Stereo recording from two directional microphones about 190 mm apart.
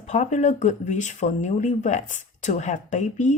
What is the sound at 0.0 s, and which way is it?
Speech, 40° left (ahead or behind).